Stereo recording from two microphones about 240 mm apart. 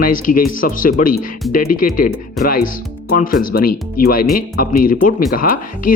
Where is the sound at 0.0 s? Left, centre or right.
Left.